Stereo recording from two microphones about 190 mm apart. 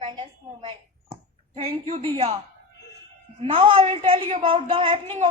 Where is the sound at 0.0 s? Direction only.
25° right (ahead or behind).